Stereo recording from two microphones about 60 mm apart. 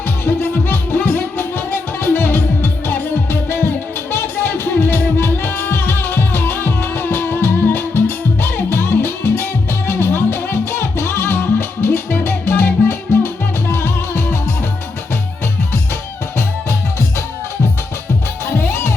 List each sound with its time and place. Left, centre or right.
0.3 s music: left
18.5 s music: left